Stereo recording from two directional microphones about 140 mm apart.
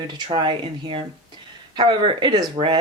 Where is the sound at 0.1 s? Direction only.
30° right (ahead or behind).